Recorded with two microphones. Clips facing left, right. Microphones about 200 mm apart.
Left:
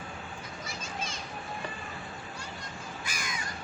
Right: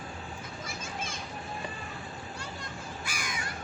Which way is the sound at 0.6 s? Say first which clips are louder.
Even; 55° right (ahead or behind).